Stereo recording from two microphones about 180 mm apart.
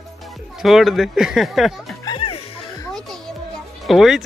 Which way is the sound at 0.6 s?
Centre (ahead or behind).